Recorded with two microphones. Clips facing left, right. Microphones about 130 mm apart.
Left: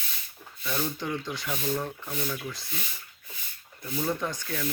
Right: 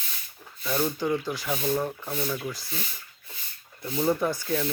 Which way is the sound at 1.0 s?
5° right (ahead or behind).